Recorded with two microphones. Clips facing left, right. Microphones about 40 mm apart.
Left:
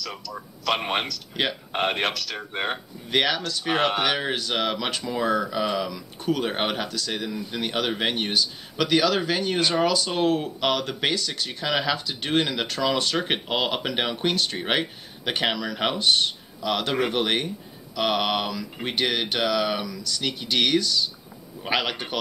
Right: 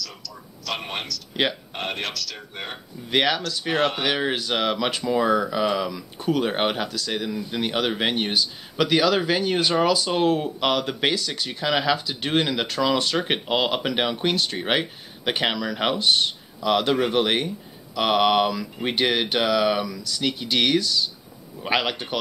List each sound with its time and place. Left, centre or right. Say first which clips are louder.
0.0 s speech: left 3 dB; left
1.3 s speech: right 3 dB; centre
1.7 s speech: left 5 dB; left
3.1 s speech: right 2 dB; centre
3.7 s speech: even; centre
4.0 s speech: right 1 dB; centre